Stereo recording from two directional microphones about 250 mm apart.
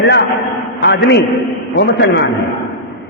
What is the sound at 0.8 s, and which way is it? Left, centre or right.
Speech, left.